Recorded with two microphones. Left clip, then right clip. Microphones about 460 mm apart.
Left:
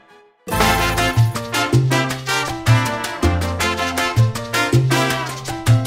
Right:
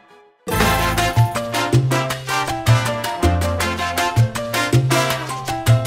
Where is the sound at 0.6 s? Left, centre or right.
Centre.